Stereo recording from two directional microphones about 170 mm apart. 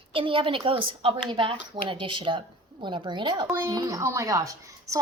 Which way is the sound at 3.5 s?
15° right (ahead or behind).